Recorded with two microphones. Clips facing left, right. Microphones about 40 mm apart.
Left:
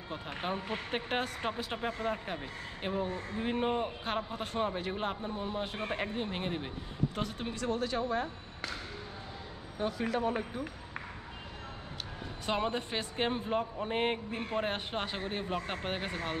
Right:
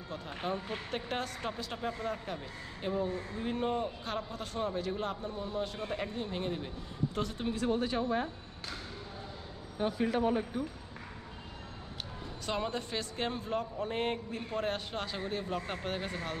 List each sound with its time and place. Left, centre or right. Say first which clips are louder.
0.1 s speech: even; left
7.2 s speech: right 2 dB; centre
7.5 s speech: right 1 dB; centre
9.8 s speech: right 2 dB; centre
12.4 s speech: left 2 dB; left